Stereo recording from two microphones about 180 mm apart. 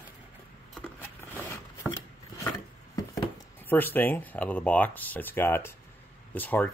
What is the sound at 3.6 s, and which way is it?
Speech, 10° left (ahead or behind).